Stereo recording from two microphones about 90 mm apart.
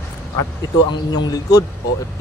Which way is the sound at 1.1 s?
45° left (ahead or behind).